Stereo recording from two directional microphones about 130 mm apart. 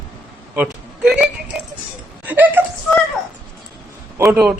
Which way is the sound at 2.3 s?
15° right (ahead or behind).